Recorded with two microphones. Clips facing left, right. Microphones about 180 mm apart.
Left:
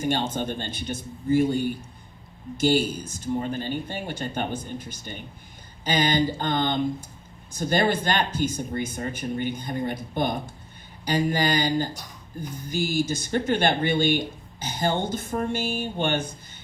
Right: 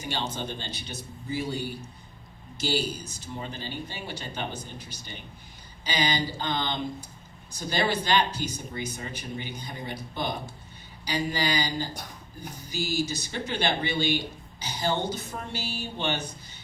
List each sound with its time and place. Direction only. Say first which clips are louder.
0.0 s speech: left 7 dB; 50° left (ahead or behind)